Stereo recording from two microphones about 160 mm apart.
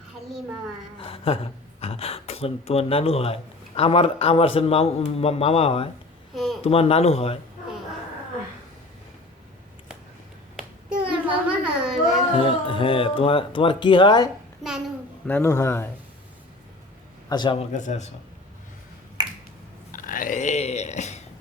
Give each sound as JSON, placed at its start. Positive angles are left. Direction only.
{"t": 0.9, "sound": "speech", "side_deg": 35}
{"t": 6.3, "sound": "a sound", "side_deg": 0}
{"t": 6.6, "sound": "speech", "side_deg": 40}
{"t": 10.6, "sound": "a sound", "side_deg": -5}
{"t": 12.4, "sound": "speech", "side_deg": 35}
{"t": 15.3, "sound": "speech", "side_deg": 15}
{"t": 17.2, "sound": "a man's voice", "side_deg": 25}
{"t": 17.7, "sound": "a man's voice", "side_deg": 45}
{"t": 19.2, "sound": "finger snapping", "side_deg": -25}
{"t": 19.9, "sound": "biting", "side_deg": 60}